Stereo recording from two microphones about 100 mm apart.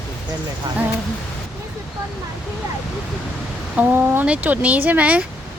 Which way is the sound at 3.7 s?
20° right (ahead or behind).